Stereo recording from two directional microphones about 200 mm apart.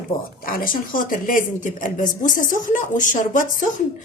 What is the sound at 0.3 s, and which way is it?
A woman's voice, 45° left (ahead or behind).